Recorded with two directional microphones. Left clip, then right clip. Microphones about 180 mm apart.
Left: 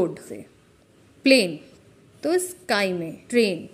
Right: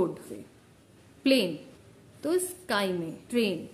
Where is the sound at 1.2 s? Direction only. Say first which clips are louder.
Left 7 dB; 25° left (ahead or behind).